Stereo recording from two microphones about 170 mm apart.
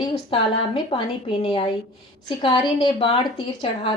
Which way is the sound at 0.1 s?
30° left (ahead or behind).